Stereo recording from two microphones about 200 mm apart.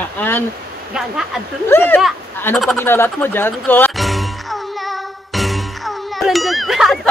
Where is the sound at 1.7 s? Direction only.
10° left (ahead or behind).